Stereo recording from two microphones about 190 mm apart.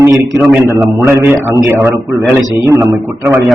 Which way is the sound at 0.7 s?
15° right (ahead or behind).